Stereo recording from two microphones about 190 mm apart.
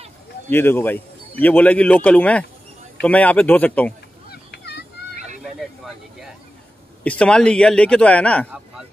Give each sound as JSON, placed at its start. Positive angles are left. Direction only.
{"t": 0.5, "sound": "speech", "side_deg": 10}
{"t": 4.3, "sound": "vehicle", "side_deg": 60}
{"t": 7.0, "sound": "a man's voice", "side_deg": 5}